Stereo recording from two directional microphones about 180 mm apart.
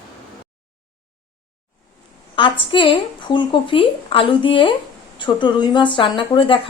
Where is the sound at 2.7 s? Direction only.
30° left (ahead or behind).